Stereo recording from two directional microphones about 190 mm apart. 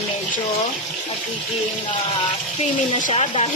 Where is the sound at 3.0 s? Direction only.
35° left (ahead or behind).